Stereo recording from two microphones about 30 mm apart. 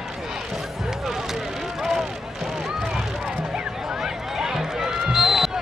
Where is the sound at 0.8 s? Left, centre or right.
Centre.